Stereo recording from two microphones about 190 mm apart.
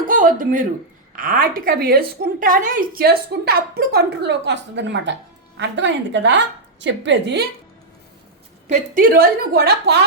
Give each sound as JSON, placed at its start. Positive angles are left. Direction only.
{"t": 0.1, "sound": "a woman's voice", "side_deg": -45}
{"t": 8.7, "sound": "a woman's voice", "side_deg": -50}